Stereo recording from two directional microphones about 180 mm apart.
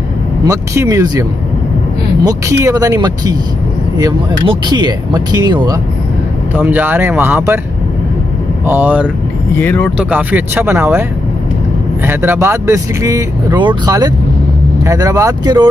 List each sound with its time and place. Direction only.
0.5 s speech: 20° right (ahead or behind)
2.2 s speech: 20° right (ahead or behind)
6.5 s speech: 10° right (ahead or behind)
8.6 s speech: 10° right (ahead or behind)
9.6 s speech: 10° left (ahead or behind)
9.9 s speech: 10° right (ahead or behind)